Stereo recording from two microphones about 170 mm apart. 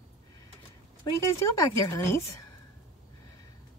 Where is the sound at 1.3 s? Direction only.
20° left (ahead or behind).